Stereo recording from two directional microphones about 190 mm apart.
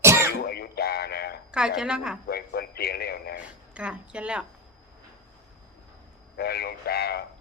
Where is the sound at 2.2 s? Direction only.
55° left (ahead or behind).